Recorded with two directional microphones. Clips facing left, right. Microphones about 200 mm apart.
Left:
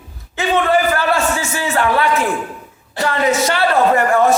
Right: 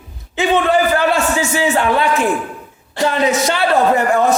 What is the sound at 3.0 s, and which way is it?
Speech, 20° right (ahead or behind).